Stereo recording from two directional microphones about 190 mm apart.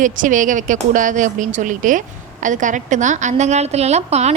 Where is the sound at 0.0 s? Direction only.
45° right (ahead or behind).